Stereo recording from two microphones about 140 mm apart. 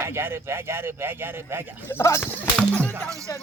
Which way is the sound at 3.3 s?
25° left (ahead or behind).